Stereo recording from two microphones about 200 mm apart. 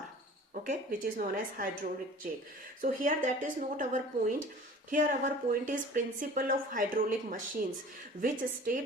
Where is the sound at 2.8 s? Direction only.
40° right (ahead or behind).